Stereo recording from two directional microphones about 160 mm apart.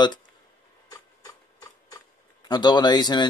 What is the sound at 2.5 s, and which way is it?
Speech, 25° left (ahead or behind).